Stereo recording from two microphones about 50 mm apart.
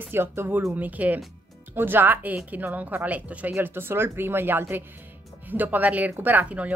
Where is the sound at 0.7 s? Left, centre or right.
Right.